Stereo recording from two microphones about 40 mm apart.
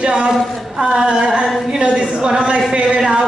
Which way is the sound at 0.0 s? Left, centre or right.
Right.